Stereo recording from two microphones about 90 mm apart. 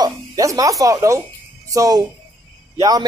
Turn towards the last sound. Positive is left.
turn(degrees=-45)  # may be behind; listen again after turning